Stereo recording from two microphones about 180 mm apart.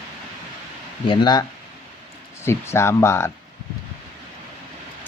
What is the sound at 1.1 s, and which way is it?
Speech, 25° left (ahead or behind).